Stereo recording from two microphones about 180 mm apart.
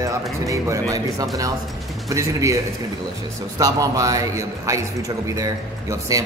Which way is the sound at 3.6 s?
20° right (ahead or behind).